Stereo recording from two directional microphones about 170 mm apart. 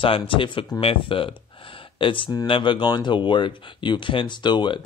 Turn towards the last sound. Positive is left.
turn(degrees=25)  # may be behind; listen again after turning